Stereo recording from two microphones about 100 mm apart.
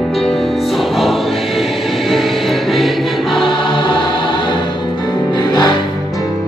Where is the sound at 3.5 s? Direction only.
60° left (ahead or behind).